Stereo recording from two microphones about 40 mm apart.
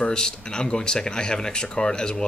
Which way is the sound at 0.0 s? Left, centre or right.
Left.